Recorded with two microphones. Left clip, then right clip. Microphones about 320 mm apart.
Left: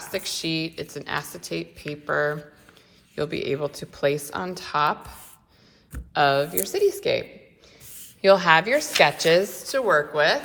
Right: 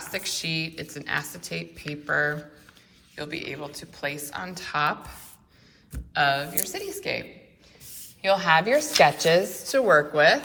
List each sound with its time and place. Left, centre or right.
0.1 s a woman's voice: centre